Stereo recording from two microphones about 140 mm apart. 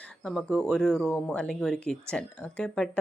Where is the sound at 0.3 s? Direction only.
5° left (ahead or behind).